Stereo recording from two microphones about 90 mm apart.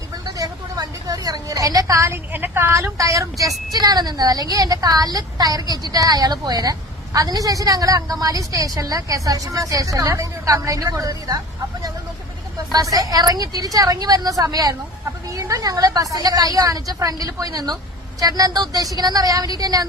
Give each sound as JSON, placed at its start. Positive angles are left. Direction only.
{"t": 0.3, "sound": "vehicle", "side_deg": -45}
{"t": 2.3, "sound": "a woman's voice", "side_deg": -20}
{"t": 2.7, "sound": "speech", "side_deg": -35}
{"t": 3.7, "sound": "a woman's voice", "side_deg": -50}
{"t": 12.7, "sound": "a woman's voice", "side_deg": -45}